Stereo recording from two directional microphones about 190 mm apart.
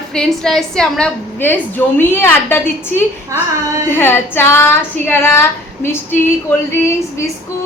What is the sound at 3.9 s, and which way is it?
Female singing, 10° left (ahead or behind).